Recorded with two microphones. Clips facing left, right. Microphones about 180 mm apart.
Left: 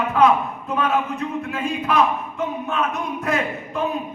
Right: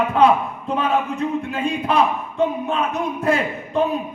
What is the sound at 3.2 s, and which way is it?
Speech, 30° right (ahead or behind).